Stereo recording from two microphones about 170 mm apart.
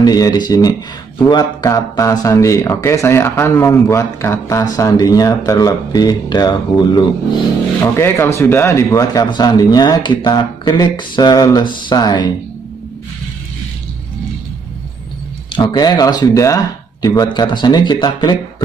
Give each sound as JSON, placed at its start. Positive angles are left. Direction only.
{"t": 0.0, "sound": "speech", "side_deg": 20}
{"t": 7.8, "sound": "speech", "side_deg": 15}
{"t": 15.5, "sound": "speech", "side_deg": 25}